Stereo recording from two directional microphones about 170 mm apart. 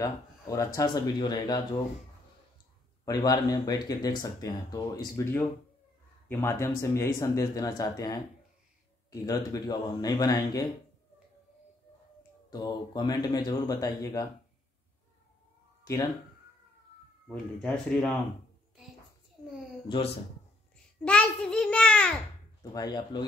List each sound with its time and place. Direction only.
0.0 s speech: 20° left (ahead or behind)
3.1 s speech: 25° left (ahead or behind)
12.4 s speech: 25° left (ahead or behind)
15.8 s speech: 20° left (ahead or behind)
17.3 s speech: 5° left (ahead or behind)
20.7 s babbling: 5° left (ahead or behind)
22.6 s speech: 25° left (ahead or behind)